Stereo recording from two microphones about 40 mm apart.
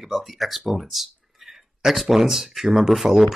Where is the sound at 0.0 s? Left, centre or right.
Centre.